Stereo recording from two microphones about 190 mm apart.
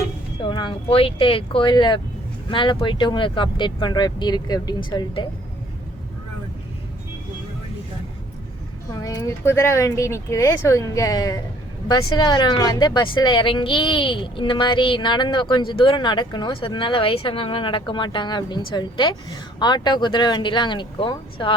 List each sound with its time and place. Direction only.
0.4 s speech: 25° left (ahead or behind)
8.9 s speech: 20° left (ahead or behind)